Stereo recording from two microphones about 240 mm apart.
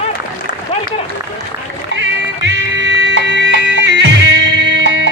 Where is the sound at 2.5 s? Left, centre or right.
Right.